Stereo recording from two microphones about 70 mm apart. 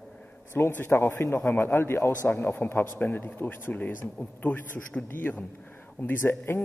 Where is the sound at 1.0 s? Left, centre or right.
Left.